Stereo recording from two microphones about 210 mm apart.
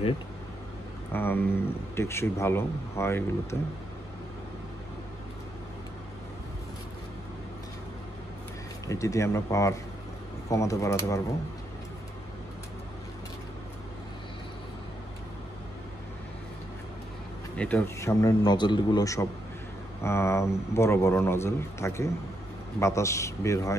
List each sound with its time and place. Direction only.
1.1 s speech: 10° left (ahead or behind)
8.8 s speech: 15° left (ahead or behind)
17.6 s speech: 10° left (ahead or behind)